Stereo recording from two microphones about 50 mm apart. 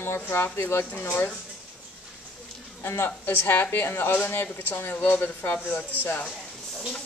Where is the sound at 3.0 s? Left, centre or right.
Left.